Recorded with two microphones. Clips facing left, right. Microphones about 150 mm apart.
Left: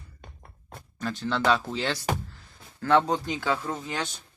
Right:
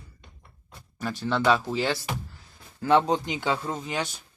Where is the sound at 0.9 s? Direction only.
5° right (ahead or behind).